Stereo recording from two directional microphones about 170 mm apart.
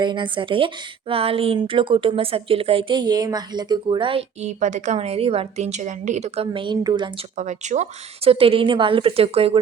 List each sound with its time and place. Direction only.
0.0 s speech: 30° right (ahead or behind)
7.3 s speech: 45° right (ahead or behind)